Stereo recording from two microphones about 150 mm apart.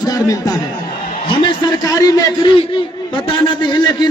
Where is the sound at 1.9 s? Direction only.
30° left (ahead or behind).